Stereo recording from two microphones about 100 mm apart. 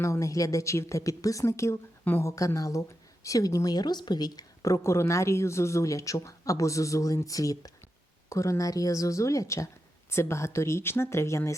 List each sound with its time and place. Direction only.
0.0 s speech: 30° left (ahead or behind)